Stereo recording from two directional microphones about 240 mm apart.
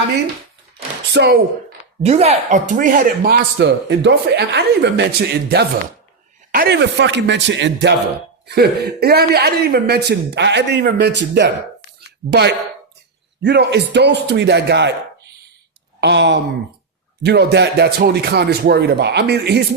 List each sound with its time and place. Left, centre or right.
1.1 s speech: right
2.0 s speech: right
16.0 s speech: right